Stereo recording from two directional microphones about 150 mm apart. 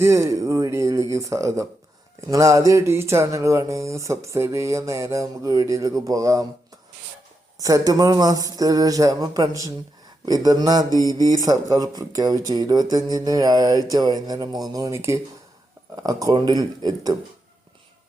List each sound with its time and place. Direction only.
0.0 s speech: 20° right (ahead or behind)
7.6 s speech: 25° right (ahead or behind)
10.9 s mantra: 25° left (ahead or behind)
11.2 s speech: 25° right (ahead or behind)